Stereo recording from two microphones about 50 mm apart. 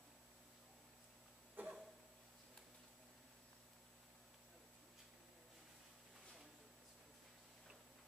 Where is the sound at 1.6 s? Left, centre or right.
Right.